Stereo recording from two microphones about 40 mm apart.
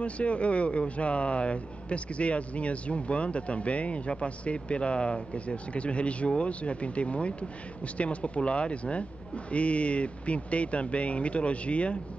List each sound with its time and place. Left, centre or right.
0.0 s speech: left